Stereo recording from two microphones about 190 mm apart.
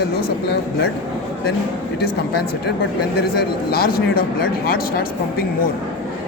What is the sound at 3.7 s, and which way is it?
Speech, 50° left (ahead or behind).